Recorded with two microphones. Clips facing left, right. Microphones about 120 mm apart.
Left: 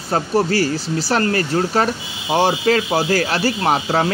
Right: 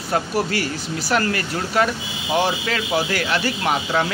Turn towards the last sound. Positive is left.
turn(degrees=35)  # may be behind; listen again after turning